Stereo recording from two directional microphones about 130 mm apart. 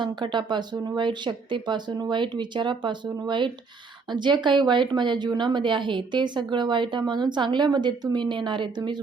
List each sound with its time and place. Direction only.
0.0 s a woman's voice: 35° right (ahead or behind)